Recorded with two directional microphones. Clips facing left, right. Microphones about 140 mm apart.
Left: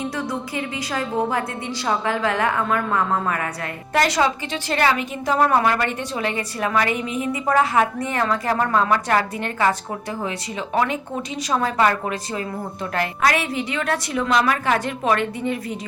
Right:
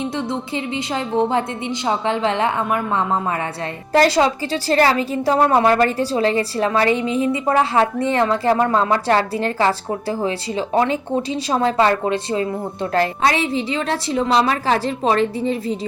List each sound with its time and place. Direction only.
0.0 s a woman's voice: 25° right (ahead or behind)